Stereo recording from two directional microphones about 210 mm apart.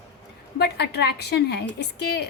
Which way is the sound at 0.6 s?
50° left (ahead or behind).